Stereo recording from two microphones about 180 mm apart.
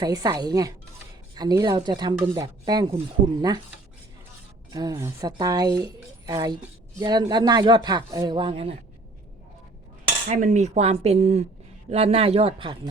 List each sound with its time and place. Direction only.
0.0 s speech: 20° right (ahead or behind)
4.7 s speech: 20° right (ahead or behind)
10.2 s speech: 45° right (ahead or behind); by 12.9 s 30° right (ahead or behind)